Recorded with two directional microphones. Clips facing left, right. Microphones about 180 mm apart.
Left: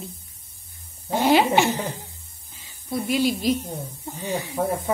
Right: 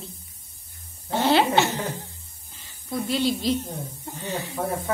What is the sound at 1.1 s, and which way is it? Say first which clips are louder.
A woman's voice: left 2 dB; 10° left (ahead or behind).